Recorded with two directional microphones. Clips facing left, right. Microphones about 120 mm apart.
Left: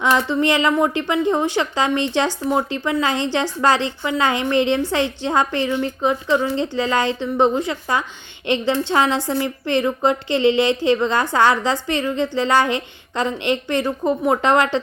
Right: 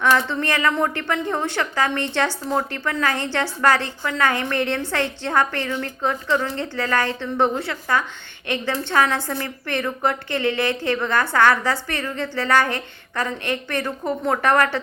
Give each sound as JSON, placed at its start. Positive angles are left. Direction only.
{"t": 0.0, "sound": "a woman's voice", "side_deg": 15}